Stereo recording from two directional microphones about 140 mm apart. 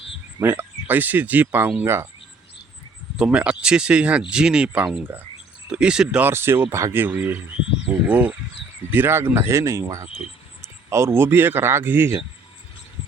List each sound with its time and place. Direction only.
0.3 s speech: 15° right (ahead or behind)
3.2 s speech: 5° right (ahead or behind)